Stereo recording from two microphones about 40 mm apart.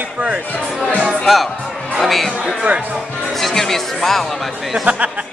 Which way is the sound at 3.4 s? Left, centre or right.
Centre.